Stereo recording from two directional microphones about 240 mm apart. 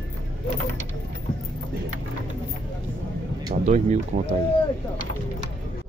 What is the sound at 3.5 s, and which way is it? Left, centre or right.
Speech, right.